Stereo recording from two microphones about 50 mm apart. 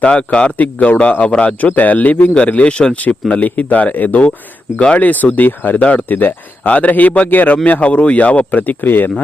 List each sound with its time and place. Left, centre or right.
0.0 s speech: left
0.5 s speech: left